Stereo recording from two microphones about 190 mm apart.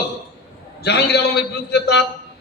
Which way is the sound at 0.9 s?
60° left (ahead or behind).